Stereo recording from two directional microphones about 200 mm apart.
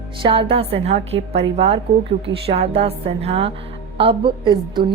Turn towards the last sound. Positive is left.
turn(degrees=-25)  # may be behind; listen again after turning